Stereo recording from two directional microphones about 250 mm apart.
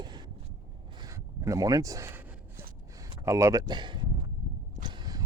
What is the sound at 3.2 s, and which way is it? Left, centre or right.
Speech, centre.